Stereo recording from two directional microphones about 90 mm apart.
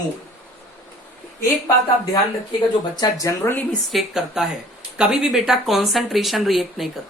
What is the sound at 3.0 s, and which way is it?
Speech, 40° left (ahead or behind).